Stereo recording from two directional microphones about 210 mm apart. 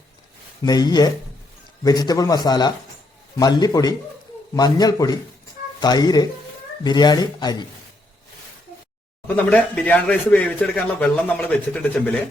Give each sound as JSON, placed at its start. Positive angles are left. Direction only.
{"t": 0.6, "sound": "a man's voice", "side_deg": 20}
{"t": 9.2, "sound": "speech", "side_deg": 5}